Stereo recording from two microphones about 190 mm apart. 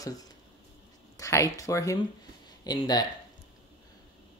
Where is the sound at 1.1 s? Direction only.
15° left (ahead or behind).